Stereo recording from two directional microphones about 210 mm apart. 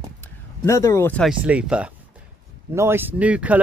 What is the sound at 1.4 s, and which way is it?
Speech, 5° right (ahead or behind).